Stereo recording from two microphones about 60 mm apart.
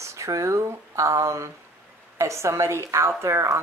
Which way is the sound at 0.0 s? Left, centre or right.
Right.